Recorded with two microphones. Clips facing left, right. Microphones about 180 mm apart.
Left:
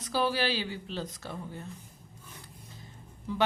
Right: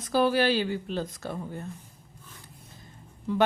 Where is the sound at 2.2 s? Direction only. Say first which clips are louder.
Left 1 dB; 15° left (ahead or behind).